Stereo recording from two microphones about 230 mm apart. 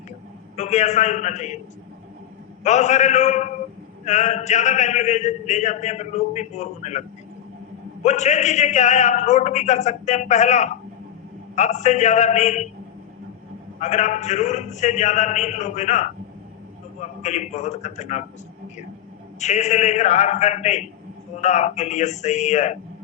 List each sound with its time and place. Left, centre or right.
0.5 s a man's voice: left
2.6 s a man's voice: left
8.0 s a man's voice: left
13.7 s a man's voice: left
17.2 s a man's voice: left
19.4 s a man's voice: left